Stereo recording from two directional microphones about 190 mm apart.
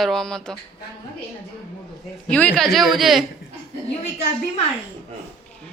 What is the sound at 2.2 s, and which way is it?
Speech, 5° left (ahead or behind).